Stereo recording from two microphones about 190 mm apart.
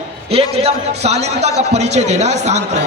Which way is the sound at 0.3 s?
35° right (ahead or behind).